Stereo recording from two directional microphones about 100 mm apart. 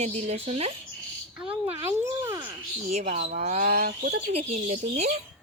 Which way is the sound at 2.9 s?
90° right.